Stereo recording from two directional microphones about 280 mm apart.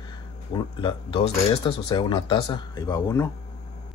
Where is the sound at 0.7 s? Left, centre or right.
Centre.